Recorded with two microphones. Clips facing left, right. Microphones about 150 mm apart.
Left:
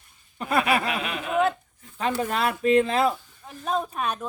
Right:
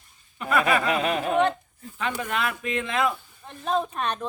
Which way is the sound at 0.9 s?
40° right (ahead or behind).